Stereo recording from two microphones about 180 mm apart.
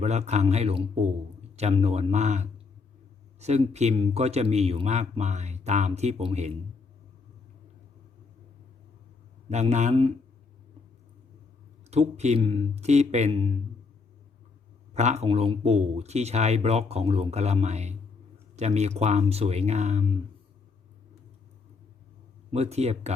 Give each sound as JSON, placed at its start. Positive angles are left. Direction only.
{"t": 0.0, "sound": "speech", "side_deg": -40}
{"t": 9.5, "sound": "speech", "side_deg": -40}
{"t": 11.9, "sound": "speech", "side_deg": -35}
{"t": 14.9, "sound": "speech", "side_deg": -40}
{"t": 22.5, "sound": "speech", "side_deg": -35}